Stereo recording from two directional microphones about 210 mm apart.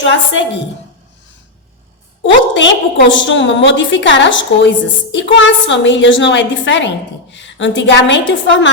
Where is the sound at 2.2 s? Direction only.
60° left (ahead or behind).